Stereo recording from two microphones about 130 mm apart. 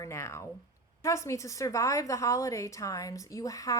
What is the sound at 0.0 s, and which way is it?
A woman's voice, 20° left (ahead or behind).